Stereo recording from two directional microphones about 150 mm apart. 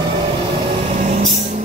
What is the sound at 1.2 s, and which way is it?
Vehicle, 35° right (ahead or behind).